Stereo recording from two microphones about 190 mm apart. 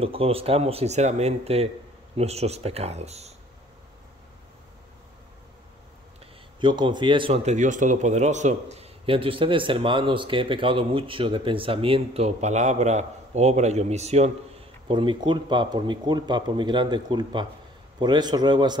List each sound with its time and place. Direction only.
0.0 s speech: 30° right (ahead or behind)
6.6 s speech: 25° right (ahead or behind)